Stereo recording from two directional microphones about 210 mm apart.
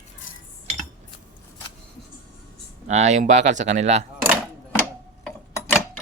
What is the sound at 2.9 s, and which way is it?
Speech, 35° right (ahead or behind).